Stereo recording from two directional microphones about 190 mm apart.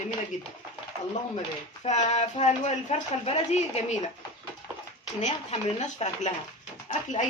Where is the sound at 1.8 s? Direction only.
35° left (ahead or behind).